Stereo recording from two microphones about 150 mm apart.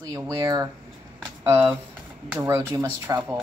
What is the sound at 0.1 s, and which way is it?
A woman's voice, 20° right (ahead or behind).